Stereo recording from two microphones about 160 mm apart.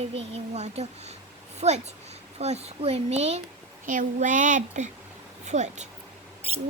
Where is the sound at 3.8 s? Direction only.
55° right (ahead or behind).